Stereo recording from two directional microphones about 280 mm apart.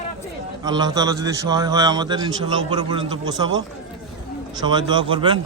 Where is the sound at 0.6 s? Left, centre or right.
Centre.